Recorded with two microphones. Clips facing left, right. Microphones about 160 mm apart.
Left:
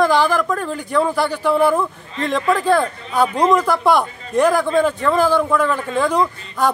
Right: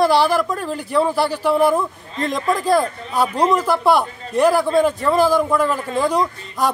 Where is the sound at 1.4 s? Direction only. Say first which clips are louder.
Even; 10° right (ahead or behind).